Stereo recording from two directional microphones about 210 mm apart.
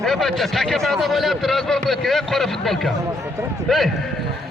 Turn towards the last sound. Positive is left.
turn(degrees=0)  # may be behind; listen again after turning